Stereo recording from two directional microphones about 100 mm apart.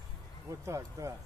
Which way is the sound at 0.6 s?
30° right (ahead or behind).